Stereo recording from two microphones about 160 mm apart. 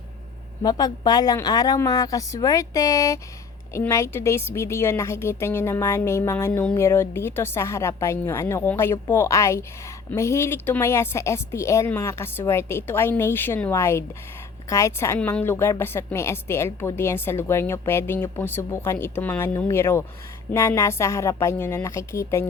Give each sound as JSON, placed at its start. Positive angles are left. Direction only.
{"t": 0.6, "sound": "a woman's voice", "side_deg": 25}